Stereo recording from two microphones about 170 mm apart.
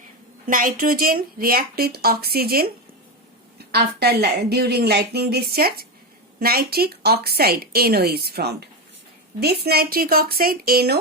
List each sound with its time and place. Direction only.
0.4 s speech: 55° right (ahead or behind)
3.7 s a woman's voice: 70° right (ahead or behind)